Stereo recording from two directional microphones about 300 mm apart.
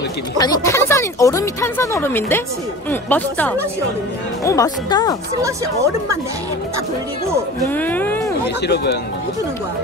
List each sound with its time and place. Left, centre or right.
0.4 s speech: centre
7.6 s music: centre
8.6 s speech: left